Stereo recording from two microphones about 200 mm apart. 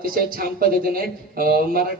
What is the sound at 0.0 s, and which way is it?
A man's voice, 45° right (ahead or behind).